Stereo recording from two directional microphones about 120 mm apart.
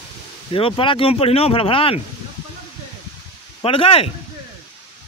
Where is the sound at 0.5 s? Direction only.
50° left (ahead or behind).